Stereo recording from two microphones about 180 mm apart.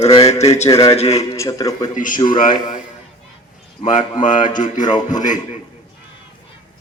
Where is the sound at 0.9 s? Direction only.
35° left (ahead or behind).